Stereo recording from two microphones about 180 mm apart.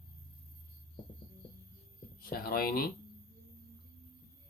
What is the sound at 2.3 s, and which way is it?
Speech, 55° left (ahead or behind).